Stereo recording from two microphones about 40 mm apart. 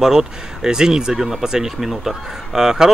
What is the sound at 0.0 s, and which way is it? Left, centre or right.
Speech, centre.